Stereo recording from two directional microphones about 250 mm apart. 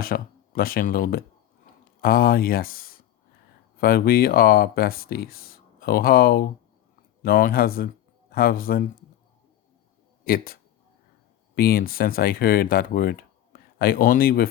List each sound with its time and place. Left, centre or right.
0.0 s speech: left
10.2 s speech: left